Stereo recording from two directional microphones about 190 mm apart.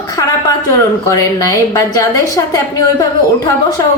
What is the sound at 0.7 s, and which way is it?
A woman's voice, 15° left (ahead or behind).